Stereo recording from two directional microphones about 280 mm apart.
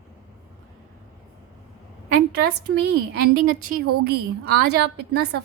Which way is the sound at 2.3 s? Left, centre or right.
Right.